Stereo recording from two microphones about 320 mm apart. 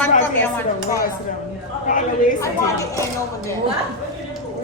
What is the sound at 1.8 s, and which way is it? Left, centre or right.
Speech, left.